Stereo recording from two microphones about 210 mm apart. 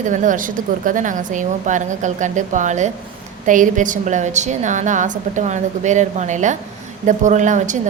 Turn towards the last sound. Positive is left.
turn(degrees=-35)  # may be behind; listen again after turning